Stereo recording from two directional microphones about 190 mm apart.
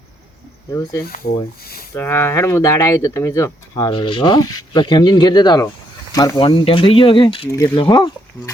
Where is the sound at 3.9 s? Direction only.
25° left (ahead or behind).